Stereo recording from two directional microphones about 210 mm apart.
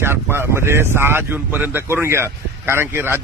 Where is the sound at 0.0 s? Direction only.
10° right (ahead or behind).